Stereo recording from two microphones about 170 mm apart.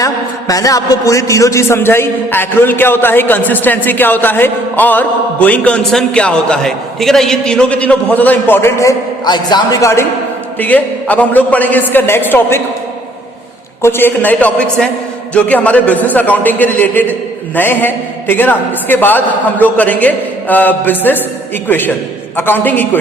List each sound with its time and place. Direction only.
0.0 s a man's voice: 20° left (ahead or behind)
13.8 s a man's voice: 10° left (ahead or behind)